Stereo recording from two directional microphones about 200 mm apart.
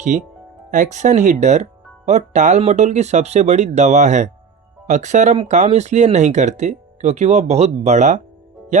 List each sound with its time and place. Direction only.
0.1 s speech: 35° right (ahead or behind)